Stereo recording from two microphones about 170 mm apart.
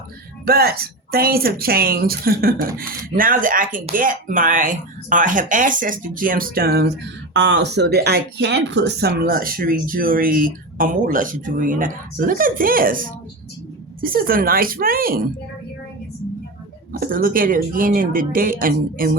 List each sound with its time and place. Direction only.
0.4 s speech: 65° right (ahead or behind)
17.0 s speech: 55° right (ahead or behind)